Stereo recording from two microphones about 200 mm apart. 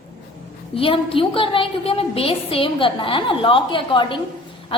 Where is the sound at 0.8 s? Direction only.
25° left (ahead or behind).